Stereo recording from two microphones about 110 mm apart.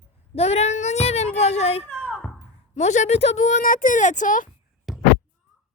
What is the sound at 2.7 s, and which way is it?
Speech, 90° left.